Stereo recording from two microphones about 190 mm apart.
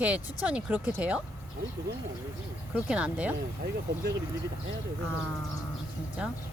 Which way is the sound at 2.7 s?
5° right (ahead or behind).